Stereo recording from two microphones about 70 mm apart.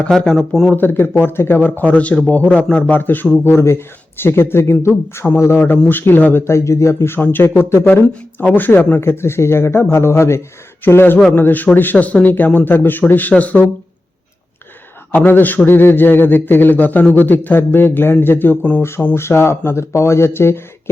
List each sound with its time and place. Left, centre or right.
0.2 s speech: centre
0.7 s a man's voice: left
3.4 s speech: left
5.2 s speech: centre
5.9 s a man's voice: left
6.4 s a man's voice: left
9.0 s speech: left
10.8 s a man's voice: left
15.1 s a man's voice: left
18.8 s speech: left